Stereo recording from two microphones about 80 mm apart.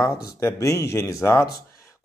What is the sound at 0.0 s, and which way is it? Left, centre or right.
A man's voice, left.